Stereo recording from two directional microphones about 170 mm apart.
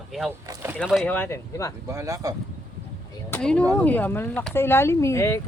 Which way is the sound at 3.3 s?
5° left (ahead or behind).